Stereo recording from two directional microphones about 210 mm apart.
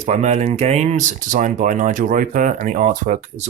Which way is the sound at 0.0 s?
35° right (ahead or behind).